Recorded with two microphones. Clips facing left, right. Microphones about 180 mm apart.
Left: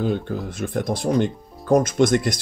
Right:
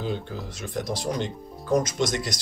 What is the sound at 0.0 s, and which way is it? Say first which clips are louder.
Speech: left 7 dB; 55° left (ahead or behind).